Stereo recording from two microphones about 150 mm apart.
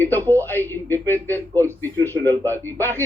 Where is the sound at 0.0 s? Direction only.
15° left (ahead or behind).